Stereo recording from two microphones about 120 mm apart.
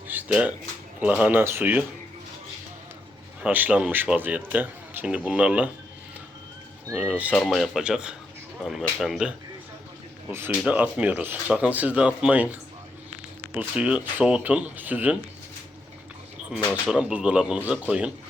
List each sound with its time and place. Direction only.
0.1 s a sound: 10° right (ahead or behind)
1.2 s a man's voice: 15° right (ahead or behind)
3.4 s a man's voice: 15° right (ahead or behind)
6.9 s a man's voice: 10° right (ahead or behind)
10.2 s a man's voice: 15° right (ahead or behind)
16.9 s a man's voice: 10° right (ahead or behind)